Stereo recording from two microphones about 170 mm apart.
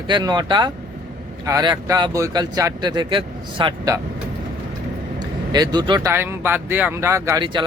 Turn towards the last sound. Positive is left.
turn(degrees=-25)  # may be behind; listen again after turning